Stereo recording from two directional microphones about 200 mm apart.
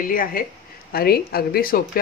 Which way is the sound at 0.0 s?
45° left (ahead or behind).